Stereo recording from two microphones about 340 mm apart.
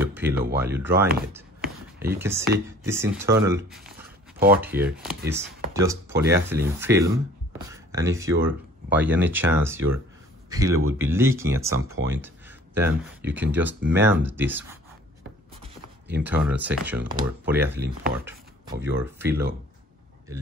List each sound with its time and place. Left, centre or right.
0.0 s a sound: centre
0.6 s a man's voice: centre
11.8 s speech: right
12.1 s speech: centre
16.2 s speech: centre